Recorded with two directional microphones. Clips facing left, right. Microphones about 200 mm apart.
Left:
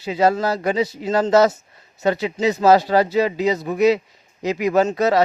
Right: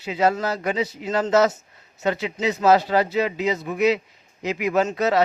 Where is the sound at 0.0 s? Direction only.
35° left (ahead or behind).